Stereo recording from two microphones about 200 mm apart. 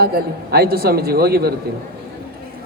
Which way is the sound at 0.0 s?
50° right (ahead or behind).